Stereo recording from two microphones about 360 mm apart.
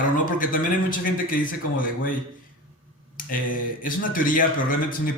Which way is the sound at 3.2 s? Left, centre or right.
Left.